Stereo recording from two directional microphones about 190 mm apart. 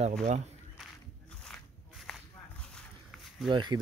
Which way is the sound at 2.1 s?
5° left (ahead or behind).